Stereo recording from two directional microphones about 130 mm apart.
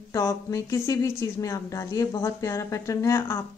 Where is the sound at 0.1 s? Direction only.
25° left (ahead or behind).